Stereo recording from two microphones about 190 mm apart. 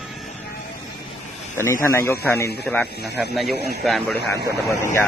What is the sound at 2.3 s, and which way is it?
Speech, 55° left (ahead or behind).